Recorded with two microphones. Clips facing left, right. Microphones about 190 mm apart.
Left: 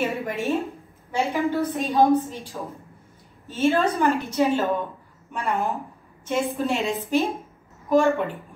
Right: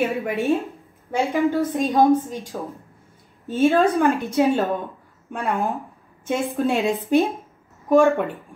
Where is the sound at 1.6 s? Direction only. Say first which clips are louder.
Even; 45° right (ahead or behind).